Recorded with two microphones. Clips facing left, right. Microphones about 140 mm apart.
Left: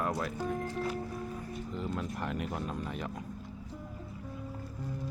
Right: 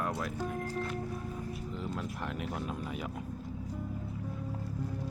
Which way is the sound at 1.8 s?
Centre (ahead or behind).